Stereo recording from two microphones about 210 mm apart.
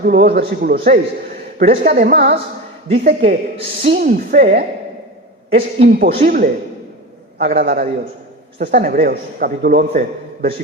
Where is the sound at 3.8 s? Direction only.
50° right (ahead or behind).